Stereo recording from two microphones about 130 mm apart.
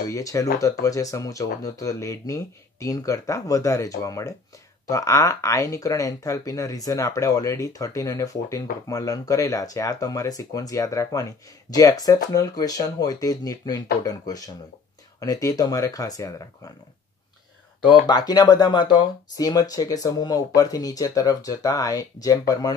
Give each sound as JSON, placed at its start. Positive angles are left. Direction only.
{"t": 0.1, "sound": "speech", "side_deg": 25}
{"t": 17.8, "sound": "speech", "side_deg": 35}